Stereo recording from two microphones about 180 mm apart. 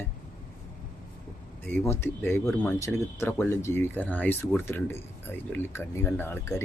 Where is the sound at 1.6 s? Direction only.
10° left (ahead or behind).